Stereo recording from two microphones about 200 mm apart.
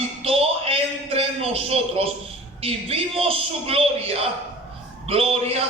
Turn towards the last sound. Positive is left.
turn(degrees=-30)  # may be behind; listen again after turning